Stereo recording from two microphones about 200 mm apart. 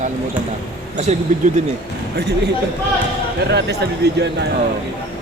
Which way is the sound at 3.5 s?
55° right (ahead or behind).